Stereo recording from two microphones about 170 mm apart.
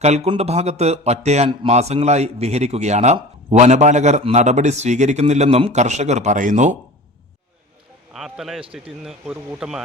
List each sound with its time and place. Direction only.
0.0 s a man's voice: 40° right (ahead or behind)
8.1 s speech: centre (ahead or behind)